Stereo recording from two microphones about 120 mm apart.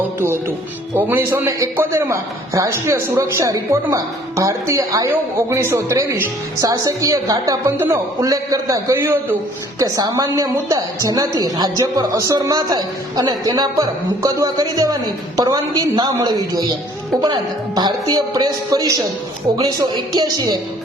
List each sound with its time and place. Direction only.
0.2 s a woman's voice: 20° right (ahead or behind)
20.1 s a woman's voice: 35° right (ahead or behind)